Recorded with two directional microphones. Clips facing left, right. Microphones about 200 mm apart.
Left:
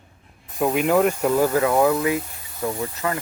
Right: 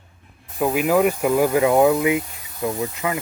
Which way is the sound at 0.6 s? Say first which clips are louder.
Right 1 dB; 5° right (ahead or behind).